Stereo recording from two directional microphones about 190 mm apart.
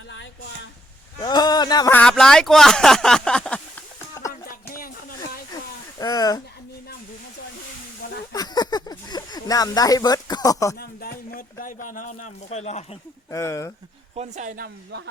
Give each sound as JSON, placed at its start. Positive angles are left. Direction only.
{"t": 0.1, "sound": "a sound", "side_deg": 70}
{"t": 1.2, "sound": "speech", "side_deg": 20}
{"t": 1.9, "sound": "speech", "side_deg": 5}
{"t": 6.0, "sound": "speech", "side_deg": 20}
{"t": 8.3, "sound": "speech", "side_deg": 20}
{"t": 10.8, "sound": "speech", "side_deg": 50}
{"t": 13.3, "sound": "speech", "side_deg": 15}
{"t": 14.2, "sound": "speech", "side_deg": -40}